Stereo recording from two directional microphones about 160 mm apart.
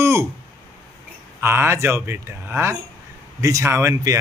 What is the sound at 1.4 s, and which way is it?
Speech, 15° right (ahead or behind).